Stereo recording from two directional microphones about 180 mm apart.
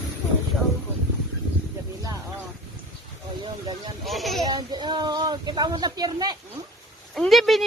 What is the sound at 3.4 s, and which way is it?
Speech, 25° right (ahead or behind).